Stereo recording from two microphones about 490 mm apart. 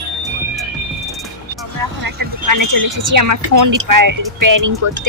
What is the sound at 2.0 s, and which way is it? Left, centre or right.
Speech, right.